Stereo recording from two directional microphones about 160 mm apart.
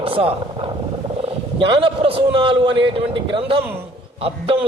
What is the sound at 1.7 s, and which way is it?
A man's voice, 35° right (ahead or behind).